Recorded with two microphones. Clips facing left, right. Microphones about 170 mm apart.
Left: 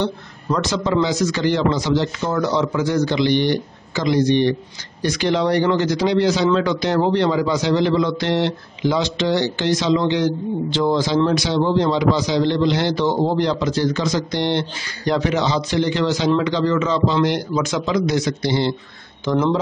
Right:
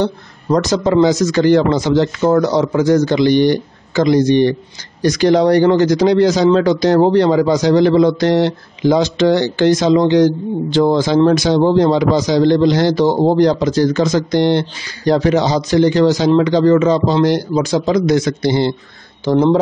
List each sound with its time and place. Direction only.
0.0 s a man's voice: 40° right (ahead or behind)
19.2 s a man's voice: 35° right (ahead or behind)